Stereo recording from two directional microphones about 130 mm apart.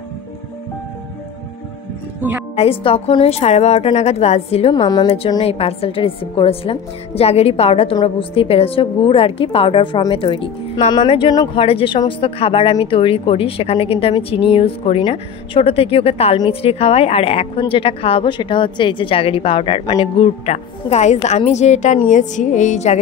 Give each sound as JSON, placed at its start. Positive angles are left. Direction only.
{"t": 2.5, "sound": "a woman's voice", "side_deg": 50}
{"t": 4.7, "sound": "speech", "side_deg": 35}
{"t": 5.4, "sound": "a woman's voice", "side_deg": 50}